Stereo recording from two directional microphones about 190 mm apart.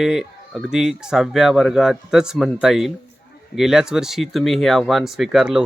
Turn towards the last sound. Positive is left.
turn(degrees=0)  # may be behind; listen again after turning